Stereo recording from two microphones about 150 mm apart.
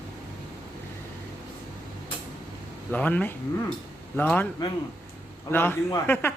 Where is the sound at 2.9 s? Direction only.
10° left (ahead or behind).